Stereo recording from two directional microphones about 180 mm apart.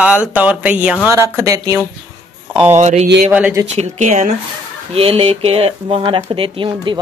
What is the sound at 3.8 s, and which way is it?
Speech, 40° right (ahead or behind).